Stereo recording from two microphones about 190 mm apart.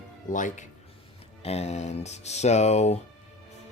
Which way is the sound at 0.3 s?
40° left (ahead or behind).